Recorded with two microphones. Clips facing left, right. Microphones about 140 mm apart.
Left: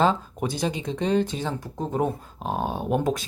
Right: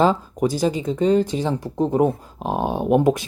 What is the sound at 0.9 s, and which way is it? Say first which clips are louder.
Speech: right 5 dB; 5° right (ahead or behind).